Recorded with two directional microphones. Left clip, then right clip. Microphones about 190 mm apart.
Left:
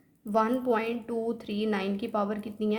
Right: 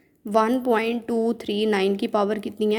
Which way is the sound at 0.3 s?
30° right (ahead or behind).